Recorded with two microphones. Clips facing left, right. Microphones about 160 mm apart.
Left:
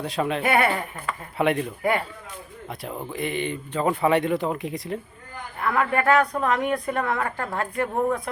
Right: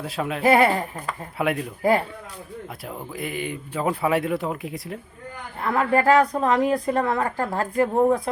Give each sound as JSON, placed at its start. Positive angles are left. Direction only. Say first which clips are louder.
{"t": 0.0, "sound": "speech", "louder": "left 2 dB", "side_deg": -5}
{"t": 0.4, "sound": "speech", "louder": "right 7 dB", "side_deg": -35}
{"t": 1.4, "sound": "speech", "louder": "left 2 dB", "side_deg": -5}
{"t": 1.8, "sound": "speech", "louder": "right 6 dB", "side_deg": -30}
{"t": 2.8, "sound": "speech", "louder": "left 4 dB", "side_deg": -5}
{"t": 5.5, "sound": "speech", "louder": "right 2 dB", "side_deg": -30}